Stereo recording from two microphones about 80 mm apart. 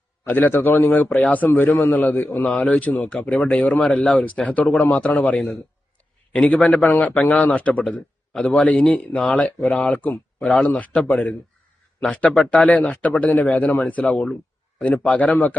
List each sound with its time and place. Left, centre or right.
0.3 s a man's voice: left